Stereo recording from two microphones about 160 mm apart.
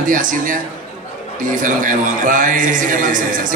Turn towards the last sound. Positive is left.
turn(degrees=-55)  # may be behind; listen again after turning